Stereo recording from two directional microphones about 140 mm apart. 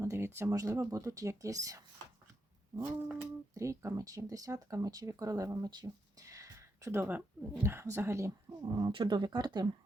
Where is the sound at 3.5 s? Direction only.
20° right (ahead or behind).